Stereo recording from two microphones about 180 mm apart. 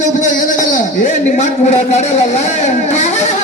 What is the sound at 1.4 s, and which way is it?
A man's voice, 40° left (ahead or behind).